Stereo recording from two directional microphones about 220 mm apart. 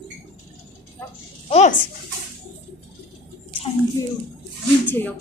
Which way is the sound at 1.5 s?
30° left (ahead or behind).